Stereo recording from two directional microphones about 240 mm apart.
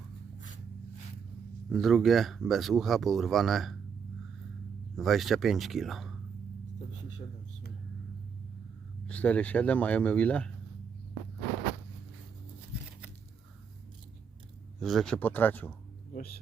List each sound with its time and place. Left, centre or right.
1.7 s speech: centre
4.9 s speech: centre
9.0 s speech: centre
12.7 s a sound: centre
14.8 s speech: centre
16.1 s speech: left